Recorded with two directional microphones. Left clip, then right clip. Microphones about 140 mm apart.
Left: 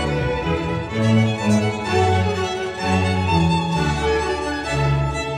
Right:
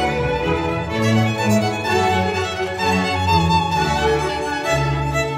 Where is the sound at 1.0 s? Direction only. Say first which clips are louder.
Right 1 dB; 45° right (ahead or behind).